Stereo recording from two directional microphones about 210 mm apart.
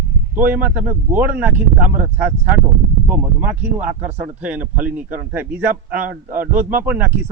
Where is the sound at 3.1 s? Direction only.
5° right (ahead or behind).